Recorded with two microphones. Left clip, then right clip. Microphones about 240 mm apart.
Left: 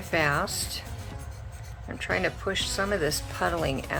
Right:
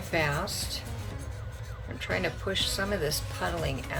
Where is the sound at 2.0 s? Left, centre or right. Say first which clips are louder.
Left 3 dB; centre.